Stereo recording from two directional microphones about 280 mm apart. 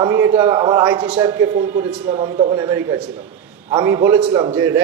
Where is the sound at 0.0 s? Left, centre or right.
Centre.